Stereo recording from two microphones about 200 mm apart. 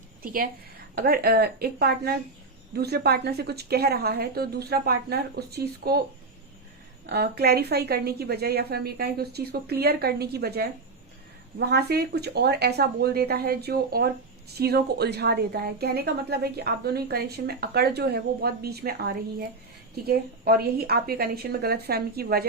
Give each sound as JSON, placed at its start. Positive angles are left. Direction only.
{"t": 0.9, "sound": "a woman's voice", "side_deg": -50}
{"t": 7.1, "sound": "a woman's voice", "side_deg": -55}